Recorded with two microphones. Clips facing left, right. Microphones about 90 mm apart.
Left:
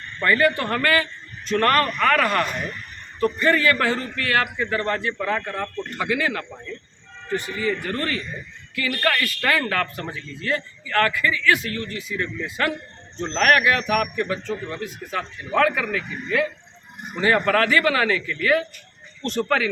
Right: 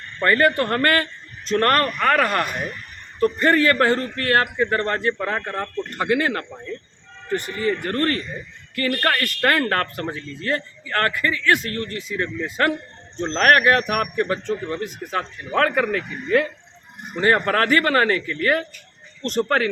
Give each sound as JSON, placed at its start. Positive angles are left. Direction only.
{"t": 0.2, "sound": "a man's voice", "side_deg": -45}
{"t": 17.2, "sound": "a man's voice", "side_deg": -40}